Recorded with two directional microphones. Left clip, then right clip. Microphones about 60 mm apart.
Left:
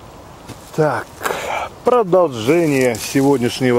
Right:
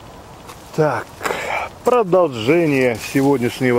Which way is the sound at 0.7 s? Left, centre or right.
Centre.